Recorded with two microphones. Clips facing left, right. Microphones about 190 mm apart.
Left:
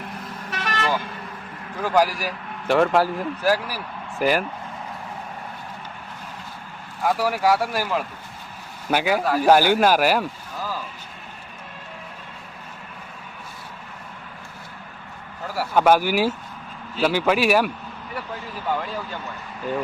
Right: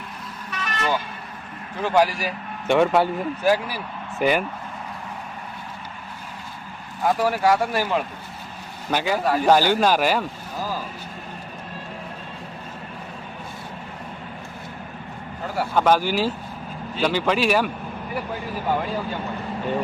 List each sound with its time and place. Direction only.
0.5 s vehicle: 75° left (ahead or behind)
1.8 s a man's voice: 10° left (ahead or behind)
7.0 s a man's voice: 5° left (ahead or behind)
15.5 s speech: 10° left (ahead or behind)